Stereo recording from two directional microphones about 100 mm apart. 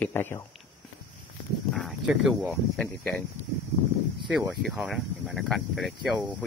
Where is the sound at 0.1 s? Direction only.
25° left (ahead or behind).